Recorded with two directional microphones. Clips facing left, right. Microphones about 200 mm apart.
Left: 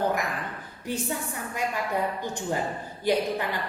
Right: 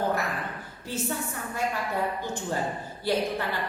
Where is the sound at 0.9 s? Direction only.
15° left (ahead or behind).